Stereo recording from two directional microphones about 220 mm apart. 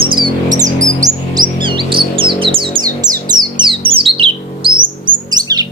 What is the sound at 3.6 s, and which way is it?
Bird, 25° right (ahead or behind).